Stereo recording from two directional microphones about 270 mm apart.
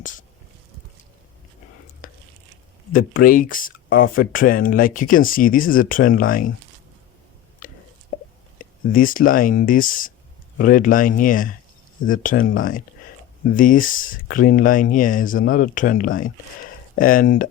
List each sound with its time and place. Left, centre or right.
3.2 s speech: left
7.6 s a sound: left
8.5 s speech: left
13.6 s speech: left